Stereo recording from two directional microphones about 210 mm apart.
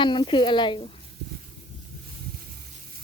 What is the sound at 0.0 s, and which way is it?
Speech, 20° left (ahead or behind).